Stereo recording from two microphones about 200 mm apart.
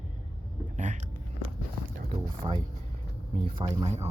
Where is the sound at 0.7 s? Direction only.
35° right (ahead or behind).